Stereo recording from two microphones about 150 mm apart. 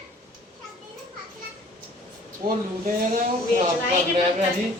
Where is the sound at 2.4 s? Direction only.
70° right (ahead or behind).